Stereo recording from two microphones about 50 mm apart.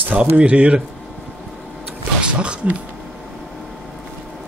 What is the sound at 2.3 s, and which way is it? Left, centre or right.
Speech, right.